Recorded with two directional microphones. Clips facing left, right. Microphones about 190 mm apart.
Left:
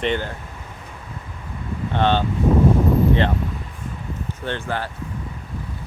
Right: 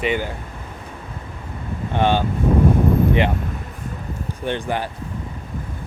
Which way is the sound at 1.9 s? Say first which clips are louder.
Right 1 dB; 10° right (ahead or behind).